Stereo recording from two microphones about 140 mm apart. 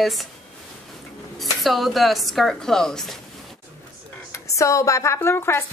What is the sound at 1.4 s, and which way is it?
A woman's voice, centre (ahead or behind).